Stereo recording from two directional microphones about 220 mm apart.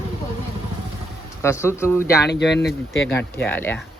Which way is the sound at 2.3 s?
50° left (ahead or behind).